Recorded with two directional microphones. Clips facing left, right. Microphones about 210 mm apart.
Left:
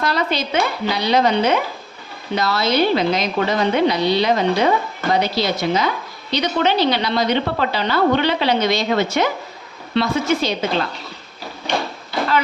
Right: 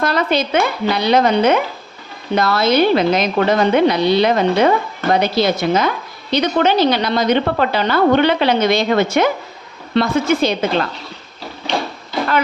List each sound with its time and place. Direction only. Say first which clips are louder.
0.0 s a woman's voice: right 4 dB; 55° right (ahead or behind)